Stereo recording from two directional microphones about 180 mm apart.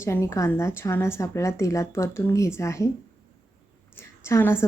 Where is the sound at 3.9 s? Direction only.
15° left (ahead or behind).